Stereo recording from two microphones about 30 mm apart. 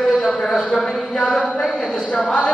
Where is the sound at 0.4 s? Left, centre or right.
Left.